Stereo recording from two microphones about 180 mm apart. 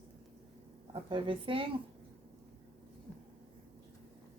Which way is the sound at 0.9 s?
30° right (ahead or behind).